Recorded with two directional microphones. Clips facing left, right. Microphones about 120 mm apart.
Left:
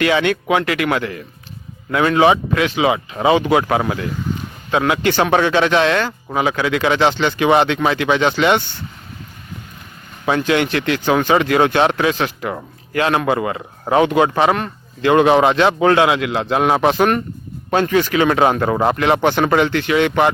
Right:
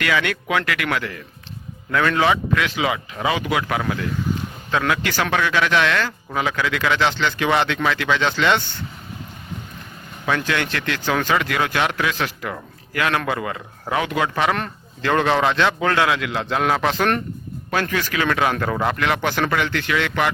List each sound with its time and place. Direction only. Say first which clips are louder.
0.0 s speech: left 6 dB; 25° left (ahead or behind)
10.2 s speech: left 6 dB; 20° left (ahead or behind)